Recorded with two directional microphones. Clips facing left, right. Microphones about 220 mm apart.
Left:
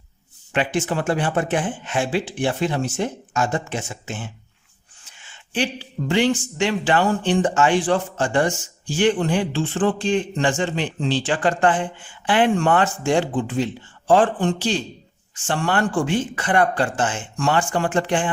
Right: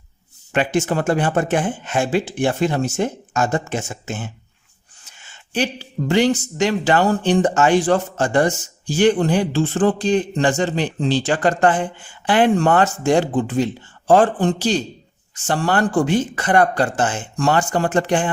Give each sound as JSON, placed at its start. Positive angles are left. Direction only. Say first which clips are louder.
{"t": 0.5, "sound": "speech", "louder": "right 3 dB", "side_deg": -45}